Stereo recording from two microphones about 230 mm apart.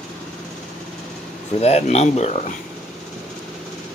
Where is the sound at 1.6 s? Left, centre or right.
Left.